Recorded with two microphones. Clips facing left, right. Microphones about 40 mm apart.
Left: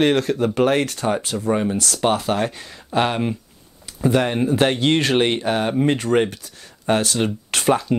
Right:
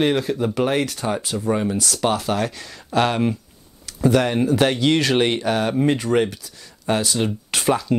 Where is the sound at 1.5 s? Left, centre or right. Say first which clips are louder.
Left 1 dB; centre.